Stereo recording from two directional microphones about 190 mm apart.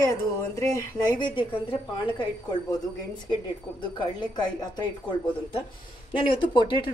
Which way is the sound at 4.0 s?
25° left (ahead or behind).